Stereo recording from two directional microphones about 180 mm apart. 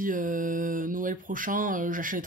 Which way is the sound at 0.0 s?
50° right (ahead or behind).